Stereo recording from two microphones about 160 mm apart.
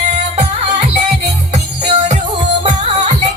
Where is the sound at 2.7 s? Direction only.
50° right (ahead or behind).